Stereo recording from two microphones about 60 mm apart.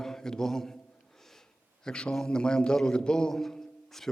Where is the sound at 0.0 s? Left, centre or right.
Centre.